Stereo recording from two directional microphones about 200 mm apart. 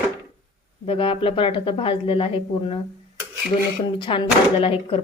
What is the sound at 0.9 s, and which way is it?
Speech, 25° left (ahead or behind).